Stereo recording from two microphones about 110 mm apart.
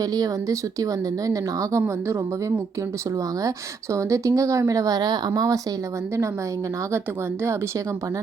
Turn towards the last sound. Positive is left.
turn(degrees=-25)  # may be behind; listen again after turning